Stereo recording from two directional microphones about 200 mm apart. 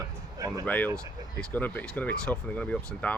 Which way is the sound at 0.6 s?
10° left (ahead or behind).